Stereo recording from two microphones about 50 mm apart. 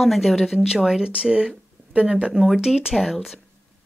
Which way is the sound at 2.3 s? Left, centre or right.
Centre.